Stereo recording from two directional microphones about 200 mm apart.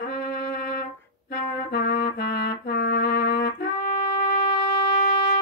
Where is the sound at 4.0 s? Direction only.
25° left (ahead or behind).